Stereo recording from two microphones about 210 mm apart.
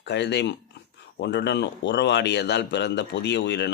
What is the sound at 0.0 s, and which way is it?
Speech, 55° left (ahead or behind).